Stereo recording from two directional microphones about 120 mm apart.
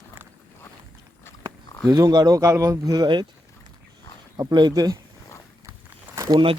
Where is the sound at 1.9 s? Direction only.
30° right (ahead or behind).